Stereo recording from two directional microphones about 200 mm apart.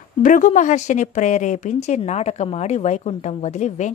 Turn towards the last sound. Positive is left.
turn(degrees=35)  # may be behind; listen again after turning